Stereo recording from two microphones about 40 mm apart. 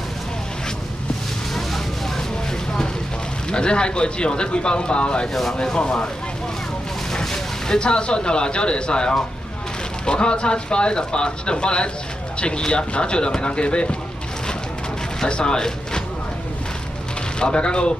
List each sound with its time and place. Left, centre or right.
1.5 s vehicle: centre
3.4 s speech: left
5.3 s speech: centre
5.6 s speech: left
7.1 s speech: centre
15.2 s speech: left
17.4 s speech: left